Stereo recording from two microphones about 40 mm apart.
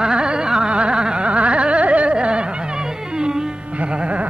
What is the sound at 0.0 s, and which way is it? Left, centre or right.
Gargling, right.